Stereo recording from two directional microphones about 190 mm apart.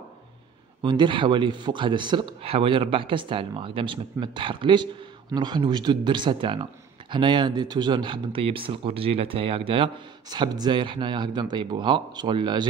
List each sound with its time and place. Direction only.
0.8 s speech: 25° right (ahead or behind)